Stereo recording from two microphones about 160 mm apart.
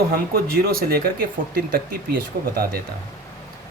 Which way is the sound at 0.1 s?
70° right (ahead or behind).